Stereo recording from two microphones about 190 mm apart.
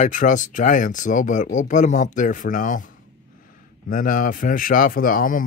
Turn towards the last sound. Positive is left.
turn(degrees=45)  # may be behind; listen again after turning